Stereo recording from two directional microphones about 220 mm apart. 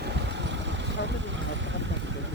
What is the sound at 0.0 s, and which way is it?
Vehicle, 50° right (ahead or behind).